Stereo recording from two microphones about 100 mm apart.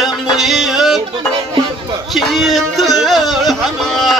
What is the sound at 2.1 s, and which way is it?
Music, centre (ahead or behind).